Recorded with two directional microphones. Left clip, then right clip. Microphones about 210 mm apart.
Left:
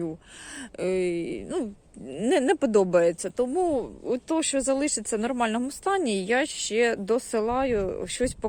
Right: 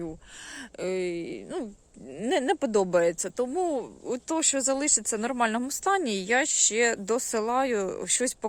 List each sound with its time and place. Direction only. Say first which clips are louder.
0.8 s speech: left 4 dB; centre (ahead or behind)